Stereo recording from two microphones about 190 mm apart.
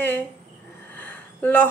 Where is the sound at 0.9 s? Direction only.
10° left (ahead or behind).